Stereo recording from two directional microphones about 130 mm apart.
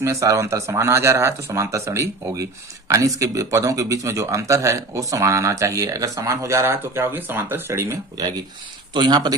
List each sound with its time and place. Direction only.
0.0 s speech: 25° right (ahead or behind)
8.9 s speech: 35° right (ahead or behind)